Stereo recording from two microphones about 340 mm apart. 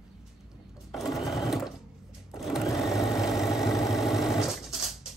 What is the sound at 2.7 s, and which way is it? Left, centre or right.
Vehicle, centre.